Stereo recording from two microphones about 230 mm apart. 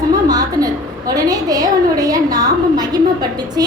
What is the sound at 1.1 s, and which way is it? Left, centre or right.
A woman's voice, centre.